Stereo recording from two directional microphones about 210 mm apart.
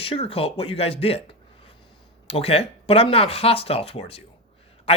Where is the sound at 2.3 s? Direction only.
30° left (ahead or behind).